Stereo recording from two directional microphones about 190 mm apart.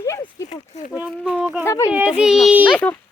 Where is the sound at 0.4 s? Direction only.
35° left (ahead or behind).